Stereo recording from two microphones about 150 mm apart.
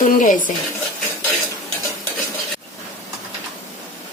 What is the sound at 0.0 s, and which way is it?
Speech, 60° left (ahead or behind).